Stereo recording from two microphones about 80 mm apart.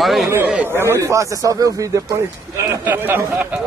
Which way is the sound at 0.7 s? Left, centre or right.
Right.